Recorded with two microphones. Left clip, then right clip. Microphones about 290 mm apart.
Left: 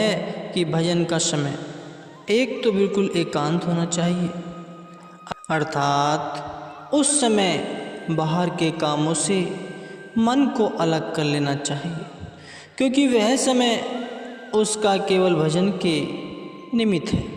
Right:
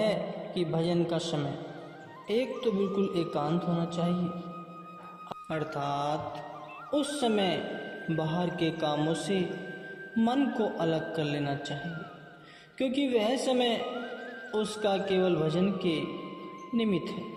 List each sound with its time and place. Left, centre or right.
0.0 s a man's voice: left
5.3 s a man's voice: left
12.8 s a man's voice: left